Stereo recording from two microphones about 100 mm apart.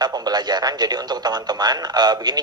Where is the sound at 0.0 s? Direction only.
45° right (ahead or behind).